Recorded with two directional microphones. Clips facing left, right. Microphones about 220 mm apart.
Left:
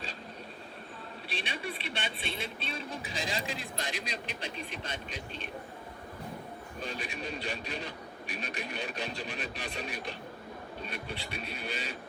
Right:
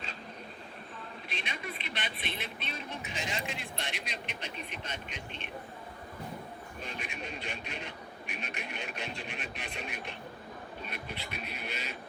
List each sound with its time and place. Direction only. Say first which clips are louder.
1.3 s a man's voice: left 3 dB; 30° left (ahead or behind)
6.7 s a man's voice: left 4 dB; 35° left (ahead or behind)